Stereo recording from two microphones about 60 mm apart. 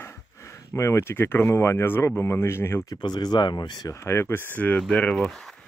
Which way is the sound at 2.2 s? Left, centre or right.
Left.